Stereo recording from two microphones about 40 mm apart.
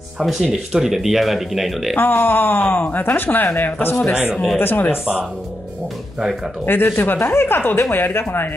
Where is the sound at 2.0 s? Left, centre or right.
Left.